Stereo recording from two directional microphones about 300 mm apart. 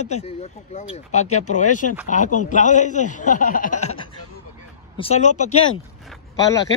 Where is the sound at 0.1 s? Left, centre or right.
Left.